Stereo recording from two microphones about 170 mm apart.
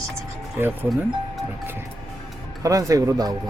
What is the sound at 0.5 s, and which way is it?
Speech, 10° right (ahead or behind).